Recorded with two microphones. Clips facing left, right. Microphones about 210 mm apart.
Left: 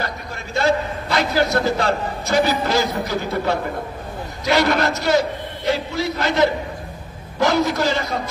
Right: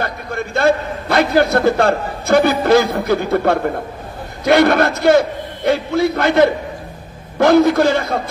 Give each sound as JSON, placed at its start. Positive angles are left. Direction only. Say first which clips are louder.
{"t": 0.0, "sound": "a man's voice", "louder": "right 6 dB", "side_deg": -55}